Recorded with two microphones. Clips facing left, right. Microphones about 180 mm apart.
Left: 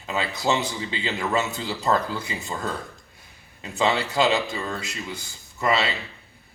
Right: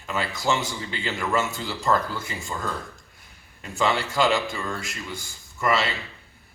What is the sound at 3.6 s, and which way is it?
A man's voice, 20° left (ahead or behind).